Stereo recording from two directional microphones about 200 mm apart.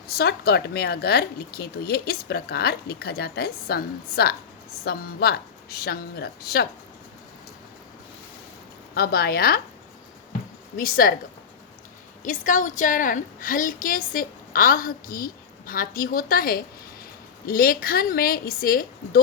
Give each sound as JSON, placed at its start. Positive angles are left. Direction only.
{"t": 0.1, "sound": "a woman's voice", "side_deg": 50}
{"t": 9.0, "sound": "a woman's voice", "side_deg": 50}
{"t": 10.8, "sound": "a woman's voice", "side_deg": 45}
{"t": 12.2, "sound": "a woman's voice", "side_deg": 40}